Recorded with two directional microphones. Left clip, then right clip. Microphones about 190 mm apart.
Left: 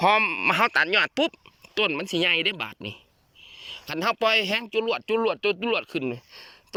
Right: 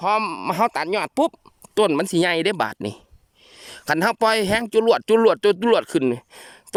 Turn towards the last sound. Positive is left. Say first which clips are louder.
# right 7 dB
turn(degrees=-50)  # may be behind; listen again after turning